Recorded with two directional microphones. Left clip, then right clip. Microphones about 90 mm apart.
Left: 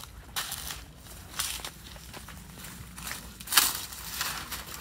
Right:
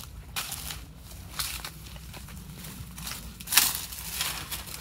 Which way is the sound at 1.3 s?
30° left (ahead or behind).